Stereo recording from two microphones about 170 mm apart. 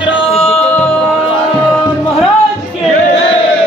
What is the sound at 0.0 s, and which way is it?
Music, 30° left (ahead or behind).